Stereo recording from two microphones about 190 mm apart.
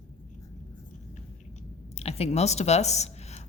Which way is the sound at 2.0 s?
35° left (ahead or behind).